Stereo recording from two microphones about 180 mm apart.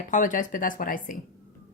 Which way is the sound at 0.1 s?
45° left (ahead or behind).